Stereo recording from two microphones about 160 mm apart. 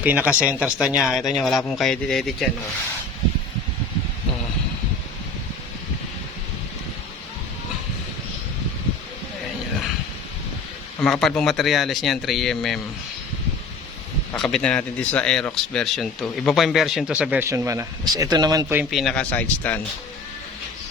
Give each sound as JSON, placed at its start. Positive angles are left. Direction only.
{"t": 0.0, "sound": "speech", "side_deg": -10}
{"t": 11.0, "sound": "speech", "side_deg": 5}
{"t": 14.3, "sound": "a man's voice", "side_deg": 5}
{"t": 18.9, "sound": "speech", "side_deg": 0}